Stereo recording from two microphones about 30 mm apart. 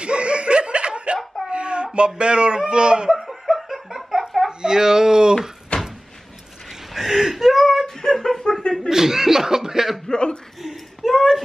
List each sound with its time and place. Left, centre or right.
0.0 s laughter: right
1.5 s a sound: right
2.0 s a man's voice: right
3.1 s laughter: centre
4.5 s speech: right
5.7 s door: left
6.9 s whimper: centre
7.8 s a sound: centre
8.5 s chuckle: left
8.8 s speech: centre
10.0 s speech: left
10.6 s a sound: centre